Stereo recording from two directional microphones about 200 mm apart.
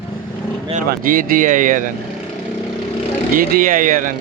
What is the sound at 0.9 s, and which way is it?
Speech, 45° right (ahead or behind).